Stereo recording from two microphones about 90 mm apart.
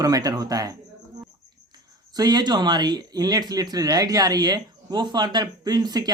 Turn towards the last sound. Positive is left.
turn(degrees=-50)  # may be behind; listen again after turning